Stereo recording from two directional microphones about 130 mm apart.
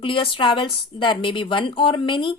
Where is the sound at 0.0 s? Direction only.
40° left (ahead or behind).